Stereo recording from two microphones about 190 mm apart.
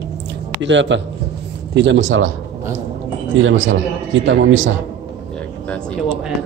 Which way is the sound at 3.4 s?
85° right.